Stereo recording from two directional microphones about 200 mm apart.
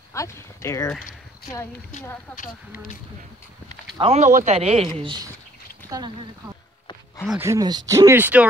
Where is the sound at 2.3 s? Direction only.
45° left (ahead or behind).